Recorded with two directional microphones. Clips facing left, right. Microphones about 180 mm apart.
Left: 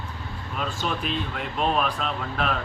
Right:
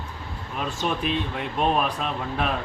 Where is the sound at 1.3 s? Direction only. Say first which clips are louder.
Even; 15° right (ahead or behind).